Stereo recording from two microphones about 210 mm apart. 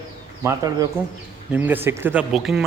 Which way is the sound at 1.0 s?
10° right (ahead or behind).